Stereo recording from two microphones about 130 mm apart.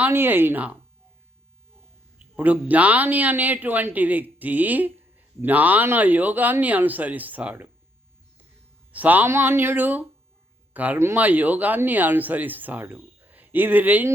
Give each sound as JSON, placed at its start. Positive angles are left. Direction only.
{"t": 0.0, "sound": "a man's voice", "side_deg": -15}
{"t": 2.1, "sound": "a man's voice", "side_deg": -10}
{"t": 8.9, "sound": "a man's voice", "side_deg": -10}